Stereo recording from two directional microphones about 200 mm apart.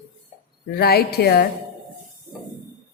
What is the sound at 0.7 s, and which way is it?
Speech, 50° left (ahead or behind).